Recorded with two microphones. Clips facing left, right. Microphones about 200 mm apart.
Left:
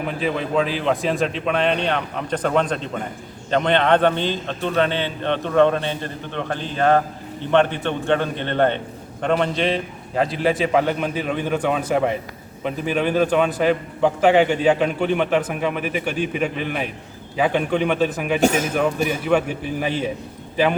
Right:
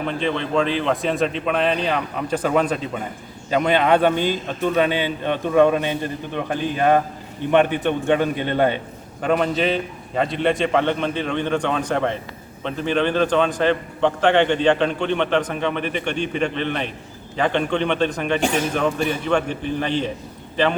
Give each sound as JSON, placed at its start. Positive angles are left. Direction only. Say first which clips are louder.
{"t": 0.0, "sound": "a man's voice", "louder": "even", "side_deg": 5}
{"t": 18.3, "sound": "a man's voice", "louder": "left 4 dB", "side_deg": 40}
{"t": 18.7, "sound": "a man's voice", "louder": "left 1 dB", "side_deg": 5}